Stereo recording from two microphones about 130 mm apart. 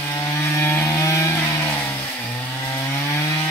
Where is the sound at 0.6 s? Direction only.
20° left (ahead or behind).